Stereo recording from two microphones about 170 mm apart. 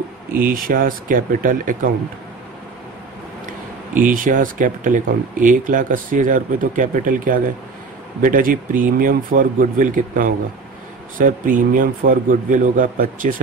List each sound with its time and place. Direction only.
0.4 s speech: 55° right (ahead or behind)
3.9 s speech: 50° right (ahead or behind)